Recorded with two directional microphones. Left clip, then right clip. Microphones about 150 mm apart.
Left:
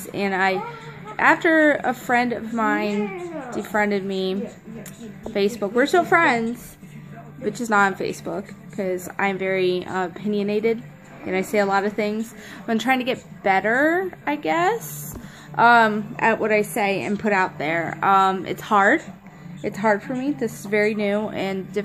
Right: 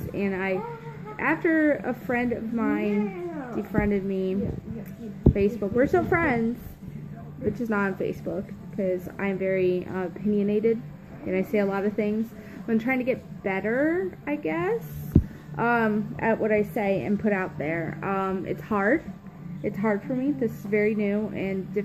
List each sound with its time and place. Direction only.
0.1 s a woman's voice: 25° left (ahead or behind)
5.8 s a woman's voice: 15° left (ahead or behind)
7.7 s a woman's voice: 20° left (ahead or behind)